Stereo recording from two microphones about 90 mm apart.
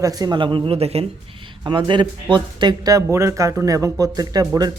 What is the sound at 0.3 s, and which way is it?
Speech, 65° right (ahead or behind).